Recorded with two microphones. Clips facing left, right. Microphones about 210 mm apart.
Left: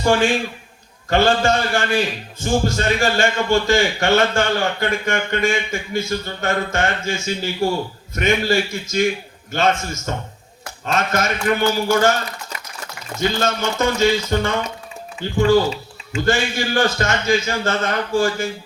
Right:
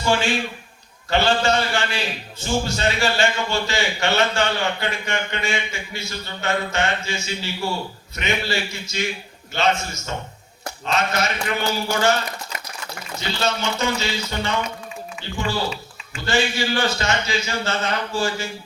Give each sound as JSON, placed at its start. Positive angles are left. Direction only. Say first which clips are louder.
{"t": 0.0, "sound": "a man's voice", "louder": "left 4 dB", "side_deg": 50}
{"t": 10.9, "sound": "a man's voice", "louder": "left 2 dB", "side_deg": 50}